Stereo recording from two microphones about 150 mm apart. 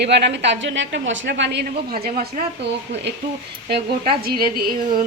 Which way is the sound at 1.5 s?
90° right.